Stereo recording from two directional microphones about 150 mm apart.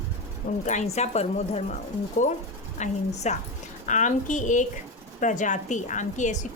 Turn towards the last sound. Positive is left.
turn(degrees=55)  # may be behind; listen again after turning